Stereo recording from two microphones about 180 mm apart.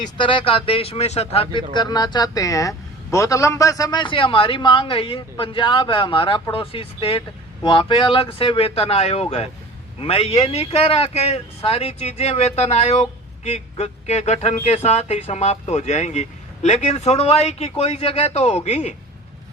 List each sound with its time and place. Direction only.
0.0 s speech: 30° left (ahead or behind)
1.7 s speech: 25° left (ahead or behind)